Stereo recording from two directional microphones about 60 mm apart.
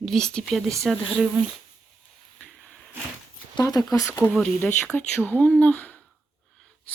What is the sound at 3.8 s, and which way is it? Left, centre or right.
Speech, left.